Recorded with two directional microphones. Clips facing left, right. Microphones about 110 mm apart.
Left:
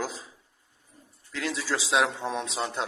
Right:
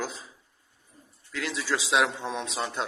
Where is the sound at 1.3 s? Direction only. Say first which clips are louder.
Even; 35° left (ahead or behind).